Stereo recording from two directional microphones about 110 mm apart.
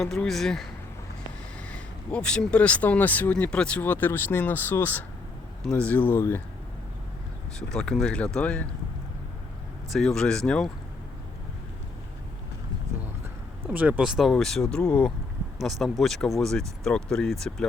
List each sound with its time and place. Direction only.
0.0 s speech: 5° left (ahead or behind); by 6.4 s 20° left (ahead or behind)
7.7 s speech: 5° left (ahead or behind)
9.9 s speech: 5° left (ahead or behind)
13.7 s speech: 15° right (ahead or behind)
14.2 s speech: centre (ahead or behind)